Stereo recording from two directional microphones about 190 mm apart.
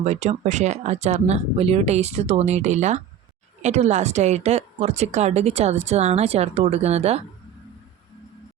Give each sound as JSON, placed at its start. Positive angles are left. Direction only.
{"t": 0.0, "sound": "a woman's voice", "side_deg": -35}